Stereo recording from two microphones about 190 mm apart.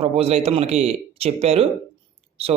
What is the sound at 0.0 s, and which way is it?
A man's voice, 30° right (ahead or behind).